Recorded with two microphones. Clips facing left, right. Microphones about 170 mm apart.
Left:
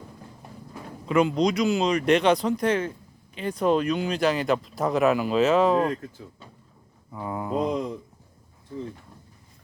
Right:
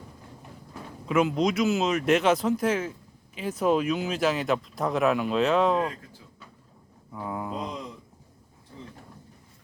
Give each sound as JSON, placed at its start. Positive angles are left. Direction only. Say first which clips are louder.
{"t": 1.0, "sound": "speech", "louder": "left 2 dB", "side_deg": -5}
{"t": 7.1, "sound": "speech", "louder": "left 2 dB", "side_deg": 0}
{"t": 7.6, "sound": "a sound", "louder": "left 9 dB", "side_deg": 50}